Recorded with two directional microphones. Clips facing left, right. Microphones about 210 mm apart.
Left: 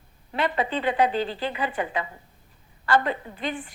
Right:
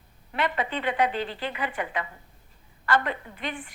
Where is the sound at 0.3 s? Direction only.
30° left (ahead or behind).